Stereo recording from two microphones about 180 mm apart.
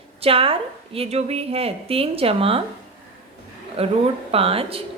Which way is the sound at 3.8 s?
30° right (ahead or behind).